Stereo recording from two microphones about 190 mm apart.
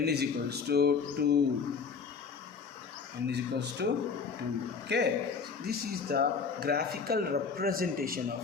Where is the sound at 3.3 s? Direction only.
65° right (ahead or behind).